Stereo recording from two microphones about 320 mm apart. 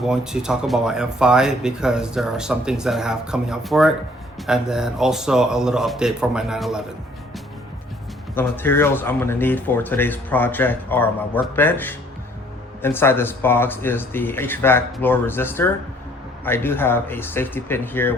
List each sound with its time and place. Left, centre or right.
0.0 s speech: centre
8.4 s speech: centre